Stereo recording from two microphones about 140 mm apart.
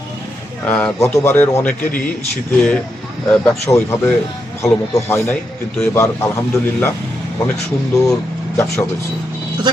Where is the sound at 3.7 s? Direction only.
20° left (ahead or behind).